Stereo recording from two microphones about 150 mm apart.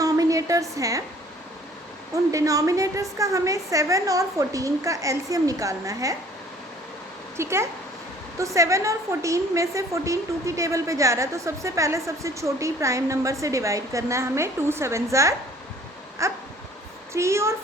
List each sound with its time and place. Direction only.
0.0 s a sound: 20° right (ahead or behind)
2.3 s a woman's voice: 20° right (ahead or behind)
7.3 s a woman's voice: 20° right (ahead or behind)